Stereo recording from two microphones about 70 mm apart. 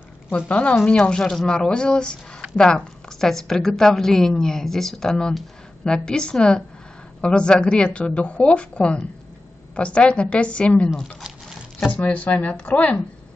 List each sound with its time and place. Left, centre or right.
0.5 s a woman's voice: centre
11.9 s speech: left